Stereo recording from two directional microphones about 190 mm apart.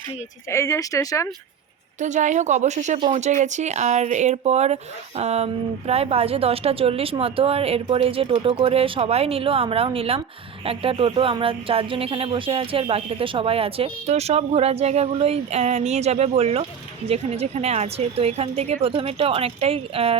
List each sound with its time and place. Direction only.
0.5 s speech: 15° left (ahead or behind)
2.0 s speech: 40° right (ahead or behind)